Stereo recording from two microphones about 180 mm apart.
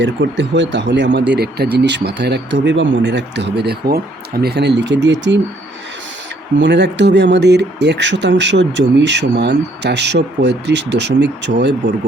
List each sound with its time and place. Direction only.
0.0 s speech: 85° right
3.6 s speech: 60° right (ahead or behind); by 5.4 s 80° right
6.6 s speech: 75° right (ahead or behind)